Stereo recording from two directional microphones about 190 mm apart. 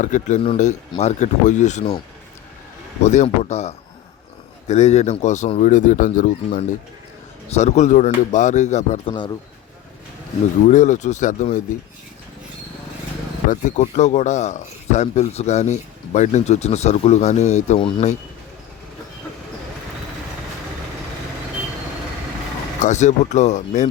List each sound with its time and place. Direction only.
0.0 s speech: 40° left (ahead or behind)
3.0 s speech: 40° left (ahead or behind)
10.7 s speech: 40° left (ahead or behind)
13.5 s speech: 40° left (ahead or behind)
22.8 s speech: 40° left (ahead or behind)